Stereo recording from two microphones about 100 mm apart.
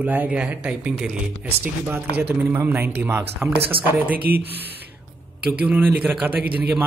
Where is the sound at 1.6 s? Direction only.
20° right (ahead or behind).